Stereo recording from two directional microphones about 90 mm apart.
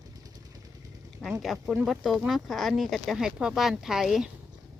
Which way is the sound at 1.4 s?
Centre (ahead or behind).